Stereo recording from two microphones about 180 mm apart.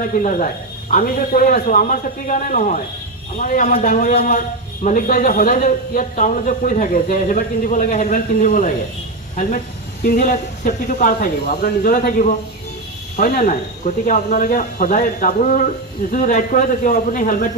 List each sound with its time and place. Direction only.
0.1 s a man's voice: 45° left (ahead or behind)
10.0 s a man's voice: 45° left (ahead or behind)